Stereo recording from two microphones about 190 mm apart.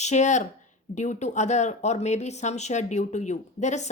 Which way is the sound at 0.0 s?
40° left (ahead or behind).